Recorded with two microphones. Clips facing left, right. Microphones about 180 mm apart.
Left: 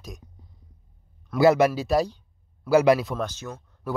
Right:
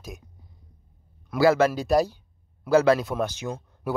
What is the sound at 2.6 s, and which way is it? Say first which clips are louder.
Speech: left 1 dB; 10° left (ahead or behind).